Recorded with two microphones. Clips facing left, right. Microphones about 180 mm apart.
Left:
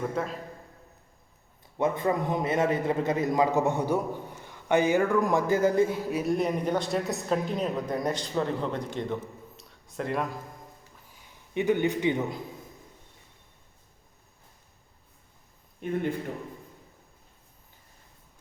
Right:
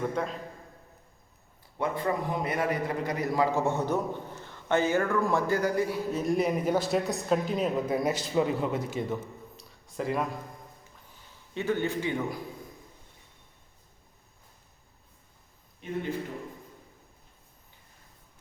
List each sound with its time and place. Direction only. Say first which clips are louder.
0.1 s speech: even; 5° left (ahead or behind)
1.8 s a man's voice: left 3 dB; 20° left (ahead or behind)
6.1 s a man's voice: left 1 dB; 10° left (ahead or behind)
6.3 s speech: right 2 dB; centre (ahead or behind)
9.6 s a sound: even; centre (ahead or behind)
11.5 s a man's voice: left 4 dB; 15° left (ahead or behind)
15.8 s a man's voice: left 6 dB; 50° left (ahead or behind)